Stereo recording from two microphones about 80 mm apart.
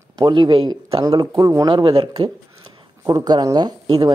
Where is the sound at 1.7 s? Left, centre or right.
Right.